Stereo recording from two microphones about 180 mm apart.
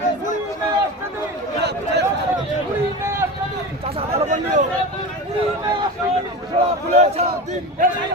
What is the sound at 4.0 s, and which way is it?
Speech, 40° right (ahead or behind).